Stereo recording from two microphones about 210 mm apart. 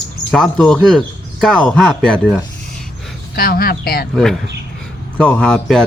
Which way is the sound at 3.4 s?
45° left (ahead or behind).